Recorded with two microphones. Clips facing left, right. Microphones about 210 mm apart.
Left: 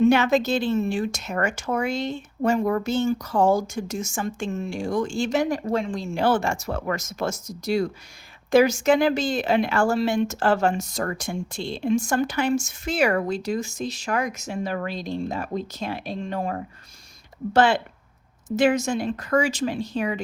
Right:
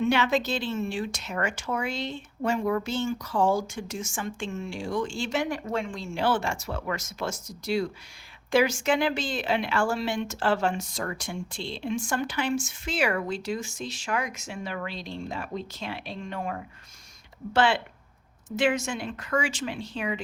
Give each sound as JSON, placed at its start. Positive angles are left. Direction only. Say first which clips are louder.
{"t": 0.0, "sound": "a woman's voice", "louder": "left 6 dB", "side_deg": 45}